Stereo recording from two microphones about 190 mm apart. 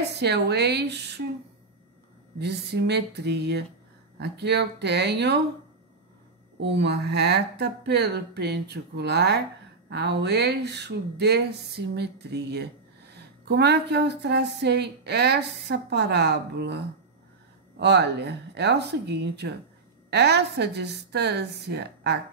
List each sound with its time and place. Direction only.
0.2 s speech: 60° right (ahead or behind)
2.3 s speech: 60° right (ahead or behind)
6.6 s speech: 65° right (ahead or behind)